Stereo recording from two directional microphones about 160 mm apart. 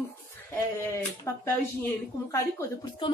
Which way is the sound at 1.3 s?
15° left (ahead or behind).